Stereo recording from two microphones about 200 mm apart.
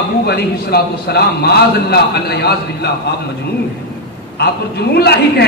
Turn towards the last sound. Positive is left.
turn(degrees=55)  # may be behind; listen again after turning